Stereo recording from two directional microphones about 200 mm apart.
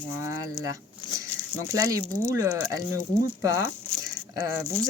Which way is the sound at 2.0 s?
5° left (ahead or behind).